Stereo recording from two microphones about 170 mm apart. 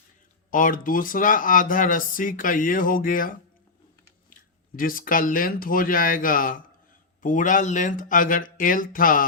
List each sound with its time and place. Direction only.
0.5 s speech: 55° left (ahead or behind)
4.4 s speech: 55° left (ahead or behind)